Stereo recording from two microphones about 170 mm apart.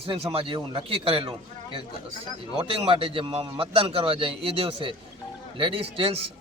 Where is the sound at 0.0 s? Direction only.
35° right (ahead or behind).